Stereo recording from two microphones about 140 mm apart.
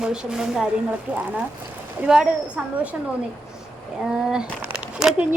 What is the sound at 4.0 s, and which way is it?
Speech, 5° right (ahead or behind).